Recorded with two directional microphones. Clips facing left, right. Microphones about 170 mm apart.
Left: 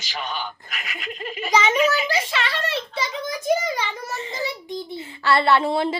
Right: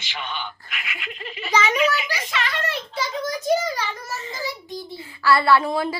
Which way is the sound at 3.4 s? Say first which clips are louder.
Left 1 dB; 15° left (ahead or behind).